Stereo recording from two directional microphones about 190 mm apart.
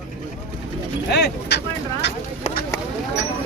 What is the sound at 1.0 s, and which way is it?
Speech, 60° left (ahead or behind).